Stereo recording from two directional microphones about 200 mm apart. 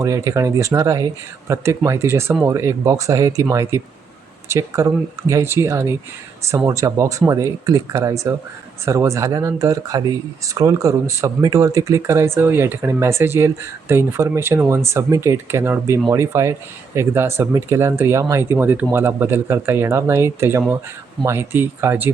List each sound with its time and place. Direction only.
0.0 s speech: 15° right (ahead or behind)